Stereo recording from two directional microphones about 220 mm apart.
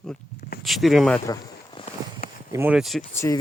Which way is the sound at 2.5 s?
10° right (ahead or behind).